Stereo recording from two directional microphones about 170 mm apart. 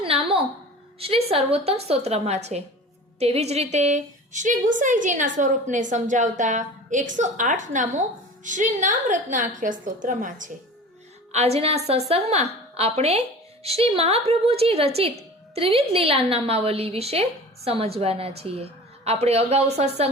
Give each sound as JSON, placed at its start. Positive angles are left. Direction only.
{"t": 0.0, "sound": "a sound", "side_deg": -35}
{"t": 0.9, "sound": "a woman's voice", "side_deg": -35}
{"t": 11.3, "sound": "speech", "side_deg": -40}